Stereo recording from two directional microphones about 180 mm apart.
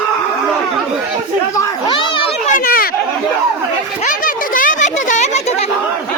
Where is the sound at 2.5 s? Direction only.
55° left (ahead or behind).